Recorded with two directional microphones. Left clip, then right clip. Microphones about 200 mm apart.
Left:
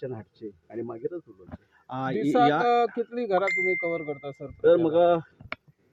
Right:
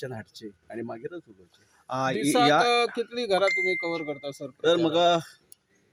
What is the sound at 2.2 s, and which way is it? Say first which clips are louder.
Speech: even; 25° left (ahead or behind).